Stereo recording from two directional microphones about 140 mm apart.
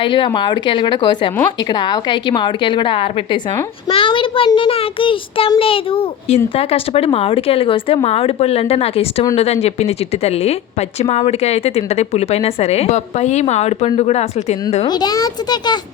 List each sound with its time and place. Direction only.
0.0 s a child's voice: 35° left (ahead or behind)
14.8 s a child's voice: 30° left (ahead or behind)